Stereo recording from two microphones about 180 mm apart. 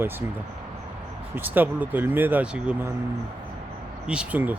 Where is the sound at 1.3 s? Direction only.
10° right (ahead or behind).